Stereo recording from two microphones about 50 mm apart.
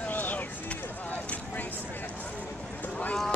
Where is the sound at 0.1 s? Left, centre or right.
Left.